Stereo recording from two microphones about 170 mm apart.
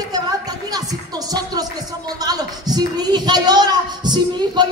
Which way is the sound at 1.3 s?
20° right (ahead or behind).